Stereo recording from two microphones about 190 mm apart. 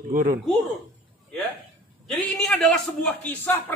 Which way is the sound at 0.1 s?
45° right (ahead or behind).